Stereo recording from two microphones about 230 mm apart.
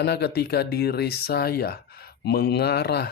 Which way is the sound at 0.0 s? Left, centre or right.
Left.